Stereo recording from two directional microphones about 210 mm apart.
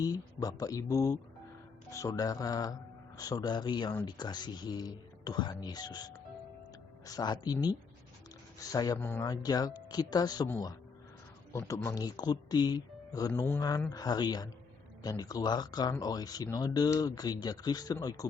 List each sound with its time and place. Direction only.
0.0 s speech: 15° left (ahead or behind)
8.7 s speech: 15° left (ahead or behind)